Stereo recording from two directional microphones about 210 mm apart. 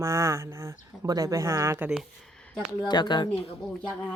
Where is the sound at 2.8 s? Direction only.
20° left (ahead or behind).